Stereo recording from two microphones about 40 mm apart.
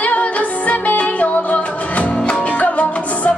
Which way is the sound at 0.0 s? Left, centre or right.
Left.